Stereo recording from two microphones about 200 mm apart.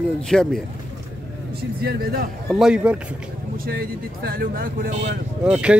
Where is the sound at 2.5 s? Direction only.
Centre (ahead or behind).